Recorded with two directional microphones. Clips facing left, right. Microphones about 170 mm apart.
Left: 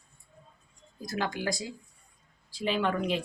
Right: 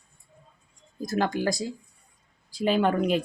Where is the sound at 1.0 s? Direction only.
45° right (ahead or behind).